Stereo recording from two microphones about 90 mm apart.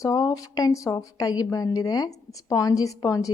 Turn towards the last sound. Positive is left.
turn(degrees=45)  # may be behind; listen again after turning